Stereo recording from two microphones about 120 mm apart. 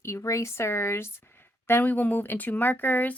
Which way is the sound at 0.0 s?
25° left (ahead or behind).